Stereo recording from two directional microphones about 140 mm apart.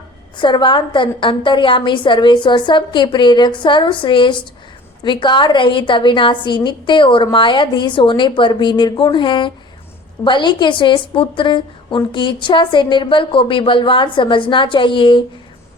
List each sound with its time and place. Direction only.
0.3 s a woman's voice: 35° left (ahead or behind)